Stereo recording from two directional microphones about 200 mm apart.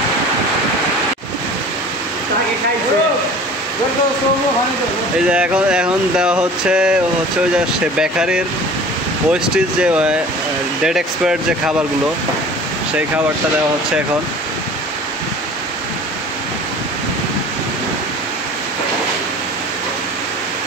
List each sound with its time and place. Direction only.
5.3 s speech: 5° right (ahead or behind)
8.0 s speech: 5° right (ahead or behind)